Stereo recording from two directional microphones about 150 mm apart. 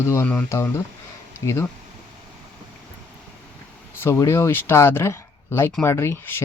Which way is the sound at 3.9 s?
15° left (ahead or behind).